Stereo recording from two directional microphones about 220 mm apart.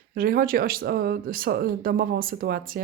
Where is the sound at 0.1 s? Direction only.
40° right (ahead or behind).